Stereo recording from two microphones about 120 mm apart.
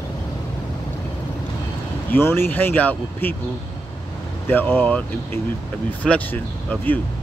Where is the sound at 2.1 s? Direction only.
20° left (ahead or behind).